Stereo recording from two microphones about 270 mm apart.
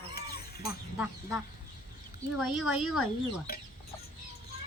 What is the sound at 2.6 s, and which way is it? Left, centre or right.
Speech, centre.